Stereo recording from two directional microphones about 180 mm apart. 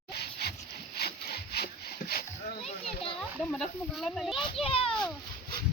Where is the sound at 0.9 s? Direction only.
60° left (ahead or behind).